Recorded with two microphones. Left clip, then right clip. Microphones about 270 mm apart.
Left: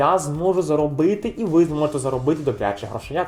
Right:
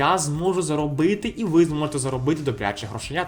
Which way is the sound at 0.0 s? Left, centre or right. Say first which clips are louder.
Left 3 dB; right.